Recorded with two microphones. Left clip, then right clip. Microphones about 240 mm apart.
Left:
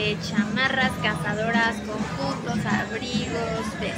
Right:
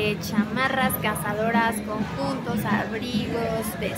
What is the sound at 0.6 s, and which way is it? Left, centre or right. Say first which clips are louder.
A woman's voice: left 1 dB; centre.